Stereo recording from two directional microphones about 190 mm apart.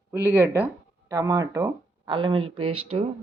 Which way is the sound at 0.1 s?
10° right (ahead or behind).